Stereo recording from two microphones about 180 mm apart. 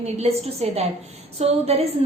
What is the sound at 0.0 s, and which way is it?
Speech, 35° right (ahead or behind).